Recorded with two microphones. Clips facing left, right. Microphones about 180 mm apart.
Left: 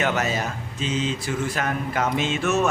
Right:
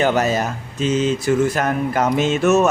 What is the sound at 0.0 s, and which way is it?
A man's voice, 35° right (ahead or behind).